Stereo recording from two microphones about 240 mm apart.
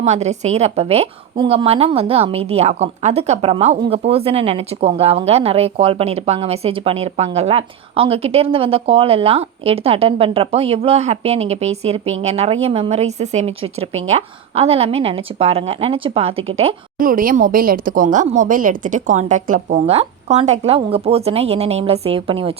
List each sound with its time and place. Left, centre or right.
0.0 s a woman's voice: right